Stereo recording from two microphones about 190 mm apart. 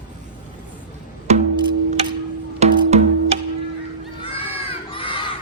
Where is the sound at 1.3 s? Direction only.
35° right (ahead or behind).